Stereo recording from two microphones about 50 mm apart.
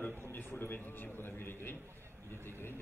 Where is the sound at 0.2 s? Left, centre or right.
Left.